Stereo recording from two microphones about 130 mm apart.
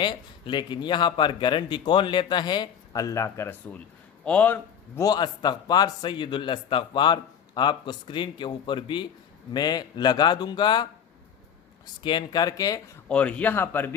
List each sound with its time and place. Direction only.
0.0 s a man's voice: 35° left (ahead or behind); by 4.6 s 10° left (ahead or behind)
4.9 s a man's voice: 30° left (ahead or behind)
12.0 s a man's voice: 35° left (ahead or behind)
13.1 s a man's voice: 10° left (ahead or behind)